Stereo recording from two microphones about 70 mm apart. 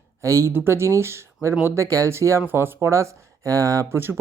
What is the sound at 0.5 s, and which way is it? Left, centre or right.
Speech, right.